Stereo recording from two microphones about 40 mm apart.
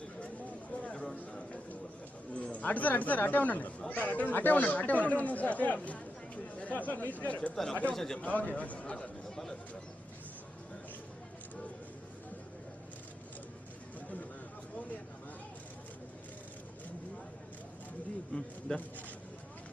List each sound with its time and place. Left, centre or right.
0.2 s a sound: left
2.3 s speech: left
7.5 s speech: centre
8.2 s speech: left
9.3 s bird: centre